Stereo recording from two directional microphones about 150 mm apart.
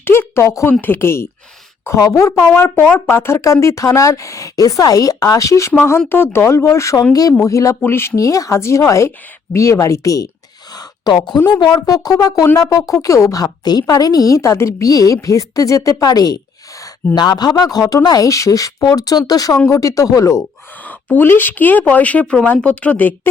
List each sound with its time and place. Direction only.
0.0 s a woman's voice: 15° left (ahead or behind)
10.8 s a sound: 30° left (ahead or behind)
11.3 s a woman's voice: 30° left (ahead or behind); by 23.3 s 10° left (ahead or behind)